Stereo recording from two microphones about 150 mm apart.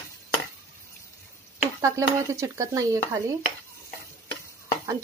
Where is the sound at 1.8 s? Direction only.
20° right (ahead or behind).